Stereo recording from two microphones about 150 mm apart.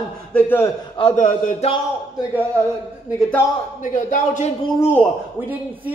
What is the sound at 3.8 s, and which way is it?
Speech, 60° left (ahead or behind).